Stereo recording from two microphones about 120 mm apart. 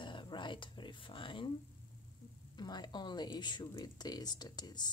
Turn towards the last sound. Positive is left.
turn(degrees=35)  # may be behind; listen again after turning